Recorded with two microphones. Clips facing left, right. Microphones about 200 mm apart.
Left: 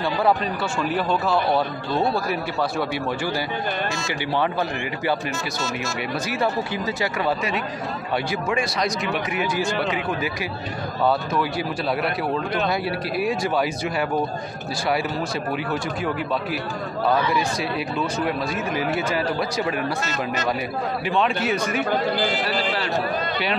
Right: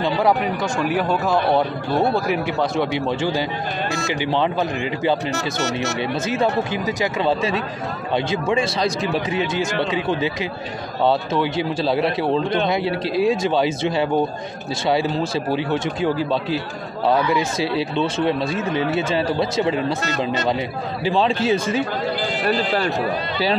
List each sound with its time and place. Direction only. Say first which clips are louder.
0.0 s speech: right 2 dB; 15° right (ahead or behind)
2.8 s a man's voice: right 4 dB; 20° right (ahead or behind)
5.3 s speech: right 5 dB; 70° right (ahead or behind)
6.2 s a man's voice: right 4 dB; 20° right (ahead or behind)
15.5 s a man's voice: right 4 dB; 25° right (ahead or behind)
21.0 s a man's voice: right 5 dB; 30° right (ahead or behind)